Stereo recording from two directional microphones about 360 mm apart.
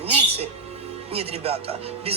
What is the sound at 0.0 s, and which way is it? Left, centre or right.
Music, centre.